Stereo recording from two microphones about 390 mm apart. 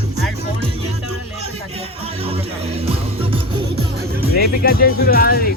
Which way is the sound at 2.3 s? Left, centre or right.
Centre.